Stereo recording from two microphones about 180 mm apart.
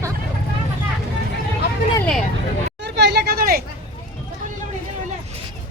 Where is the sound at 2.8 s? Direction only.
70° right (ahead or behind).